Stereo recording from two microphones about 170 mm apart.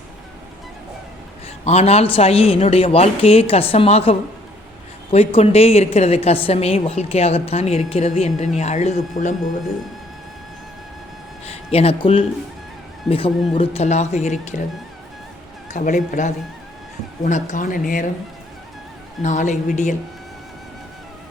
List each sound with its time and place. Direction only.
1.6 s a woman's voice: 40° left (ahead or behind)
11.4 s a woman's voice: 35° left (ahead or behind)
15.7 s speech: 45° left (ahead or behind)
19.2 s speech: 45° left (ahead or behind)